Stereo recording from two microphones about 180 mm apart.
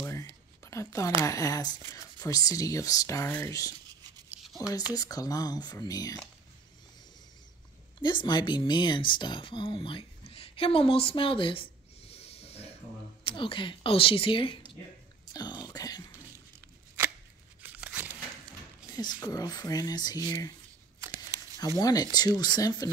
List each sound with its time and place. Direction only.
0.0 s a sound: 15° left (ahead or behind)
0.7 s speech: 15° left (ahead or behind)
4.9 s speech: 20° left (ahead or behind)
8.0 s speech: 25° left (ahead or behind)
17.6 s tearing: 10° right (ahead or behind)
18.9 s speech: 20° left (ahead or behind)
21.0 s crumpling: 20° right (ahead or behind)
21.7 s speech: 20° left (ahead or behind)